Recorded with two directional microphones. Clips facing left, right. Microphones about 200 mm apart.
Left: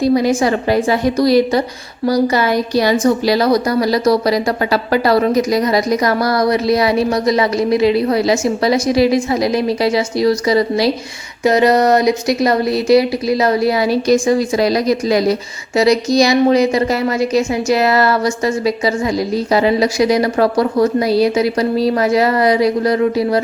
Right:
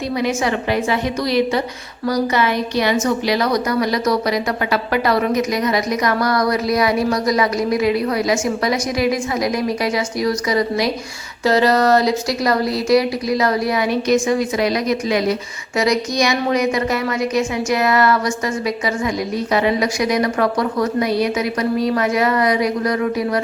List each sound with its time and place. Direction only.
0.0 s speech: 35° left (ahead or behind)
11.4 s speech: 20° left (ahead or behind)